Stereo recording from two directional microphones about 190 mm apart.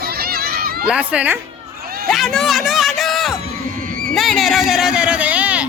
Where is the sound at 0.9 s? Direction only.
5° right (ahead or behind).